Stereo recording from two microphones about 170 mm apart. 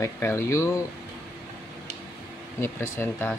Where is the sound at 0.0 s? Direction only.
15° left (ahead or behind).